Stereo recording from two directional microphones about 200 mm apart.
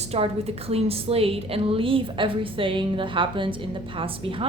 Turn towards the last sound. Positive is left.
turn(degrees=-25)  # may be behind; listen again after turning